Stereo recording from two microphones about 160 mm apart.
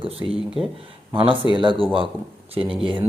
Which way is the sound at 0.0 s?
35° right (ahead or behind).